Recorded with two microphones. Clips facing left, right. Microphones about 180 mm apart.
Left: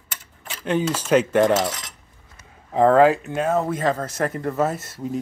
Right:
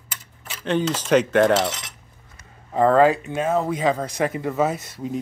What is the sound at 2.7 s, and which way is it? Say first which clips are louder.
Speech: left 1 dB; 5° left (ahead or behind).